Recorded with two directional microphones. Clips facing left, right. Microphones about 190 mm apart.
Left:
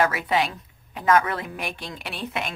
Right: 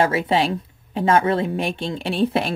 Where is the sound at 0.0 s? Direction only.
30° right (ahead or behind).